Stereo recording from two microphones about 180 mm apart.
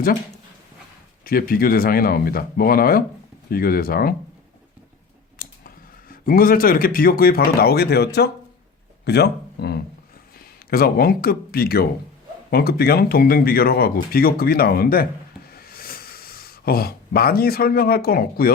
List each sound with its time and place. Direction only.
1.2 s speech: 55° left (ahead or behind)
5.4 s speech: 55° left (ahead or behind)
15.5 s a sound: 55° left (ahead or behind)